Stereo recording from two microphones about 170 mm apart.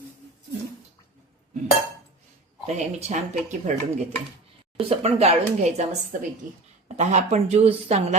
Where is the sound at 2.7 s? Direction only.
45° right (ahead or behind).